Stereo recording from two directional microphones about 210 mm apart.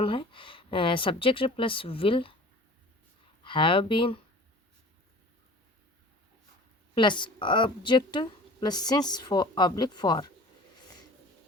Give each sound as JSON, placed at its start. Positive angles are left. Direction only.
{"t": 0.0, "sound": "a woman's voice", "side_deg": 25}
{"t": 3.4, "sound": "a woman's voice", "side_deg": 25}
{"t": 6.9, "sound": "a woman's voice", "side_deg": 20}